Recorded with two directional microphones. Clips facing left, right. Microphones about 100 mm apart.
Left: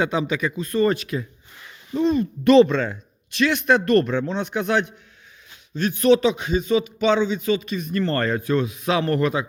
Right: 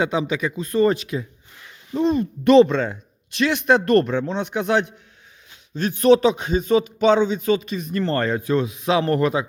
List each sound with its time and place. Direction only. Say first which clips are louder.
0.0 s speech: right 1 dB; 15° right (ahead or behind)
0.6 s speech: right 3 dB; 30° right (ahead or behind)
5.7 s a man's voice: right 2 dB; 35° right (ahead or behind)